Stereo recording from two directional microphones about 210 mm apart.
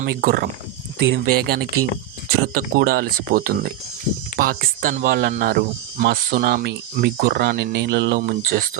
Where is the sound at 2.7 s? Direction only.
45° right (ahead or behind).